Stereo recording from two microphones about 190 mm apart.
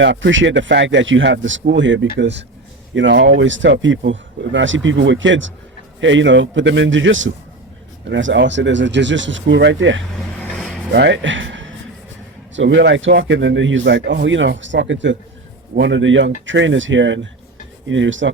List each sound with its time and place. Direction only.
0.0 s a man's voice: 75° right (ahead or behind)
8.1 s a man's voice: 70° right (ahead or behind)